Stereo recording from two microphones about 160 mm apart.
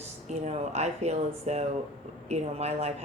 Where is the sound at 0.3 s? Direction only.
45° right (ahead or behind).